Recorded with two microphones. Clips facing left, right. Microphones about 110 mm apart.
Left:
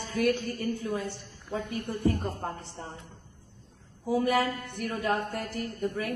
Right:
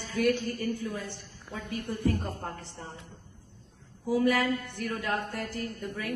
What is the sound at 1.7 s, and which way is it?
Speech, 60° left (ahead or behind).